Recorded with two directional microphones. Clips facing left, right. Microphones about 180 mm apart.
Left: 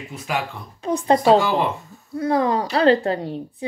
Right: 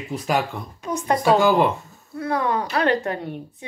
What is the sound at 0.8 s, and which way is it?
A woman's voice, 30° left (ahead or behind).